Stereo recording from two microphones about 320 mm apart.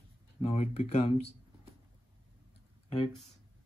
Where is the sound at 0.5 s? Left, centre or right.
Centre.